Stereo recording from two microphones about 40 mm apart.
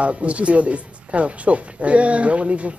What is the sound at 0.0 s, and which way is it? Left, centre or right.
Speech, right.